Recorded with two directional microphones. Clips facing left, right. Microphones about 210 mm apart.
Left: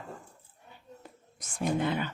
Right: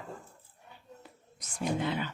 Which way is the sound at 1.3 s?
50° left (ahead or behind).